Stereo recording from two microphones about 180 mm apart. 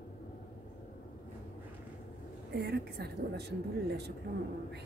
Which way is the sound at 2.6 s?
60° right (ahead or behind).